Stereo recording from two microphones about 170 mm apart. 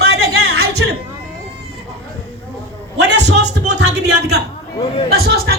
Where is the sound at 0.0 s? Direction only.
75° right (ahead or behind).